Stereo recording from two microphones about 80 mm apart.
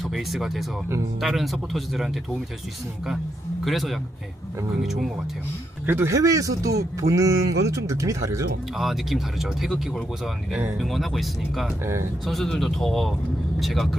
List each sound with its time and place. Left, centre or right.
0.0 s speech: centre
3.6 s speech: centre
5.8 s a man's voice: right
6.1 s speech: right
8.7 s speech: centre
10.5 s speech: right
10.8 s speech: centre